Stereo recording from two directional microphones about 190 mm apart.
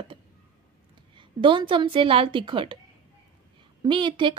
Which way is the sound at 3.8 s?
25° right (ahead or behind).